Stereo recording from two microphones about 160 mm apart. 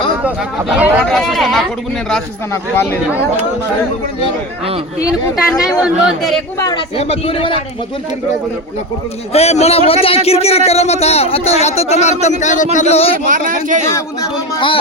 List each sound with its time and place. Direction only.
0.2 s speech: 10° right (ahead or behind)
1.0 s speech: 5° left (ahead or behind)
2.5 s speech: 15° left (ahead or behind)
5.8 s speech: centre (ahead or behind)
6.9 s speech: 40° left (ahead or behind)
9.3 s speech: 40° left (ahead or behind)
13.2 s speech: 55° right (ahead or behind)
13.8 s speech: 20° left (ahead or behind)